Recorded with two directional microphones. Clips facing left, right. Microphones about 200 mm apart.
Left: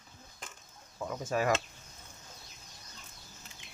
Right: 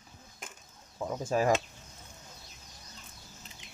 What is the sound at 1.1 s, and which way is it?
Speech, 30° right (ahead or behind).